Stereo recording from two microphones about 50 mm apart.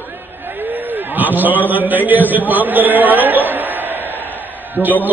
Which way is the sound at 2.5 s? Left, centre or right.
Right.